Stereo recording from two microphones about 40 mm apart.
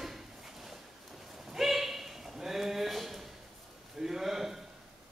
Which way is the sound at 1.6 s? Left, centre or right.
Centre.